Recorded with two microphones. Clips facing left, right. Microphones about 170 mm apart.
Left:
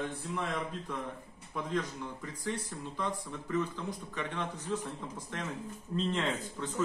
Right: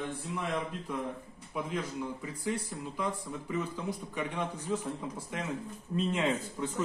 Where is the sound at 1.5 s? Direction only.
10° right (ahead or behind).